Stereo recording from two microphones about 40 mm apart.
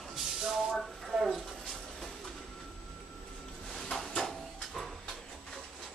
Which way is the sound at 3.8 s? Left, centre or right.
Centre.